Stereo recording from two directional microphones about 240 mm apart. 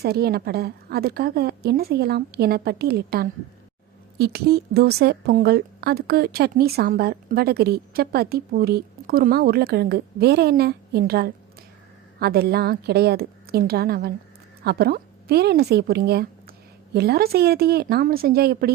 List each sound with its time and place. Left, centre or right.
0.0 s a woman's voice: right